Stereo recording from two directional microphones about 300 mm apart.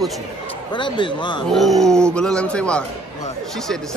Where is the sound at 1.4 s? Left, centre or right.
Centre.